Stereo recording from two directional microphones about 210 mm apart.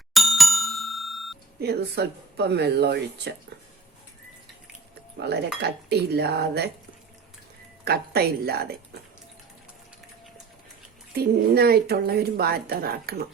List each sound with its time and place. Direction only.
0.1 s bicycle bell: centre (ahead or behind)
1.6 s speech: 50° right (ahead or behind)
5.1 s speech: 50° right (ahead or behind)
7.9 s speech: 50° right (ahead or behind)
11.1 s speech: 50° right (ahead or behind)